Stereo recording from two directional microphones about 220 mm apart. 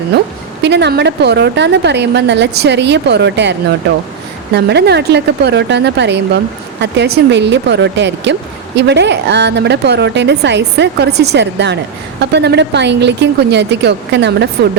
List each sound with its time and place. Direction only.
0.6 s speech: 50° right (ahead or behind)
4.5 s speech: 50° right (ahead or behind)